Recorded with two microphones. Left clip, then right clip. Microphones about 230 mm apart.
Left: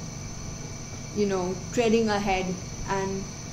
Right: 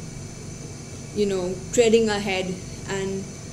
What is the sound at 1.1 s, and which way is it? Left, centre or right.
A woman's voice, left.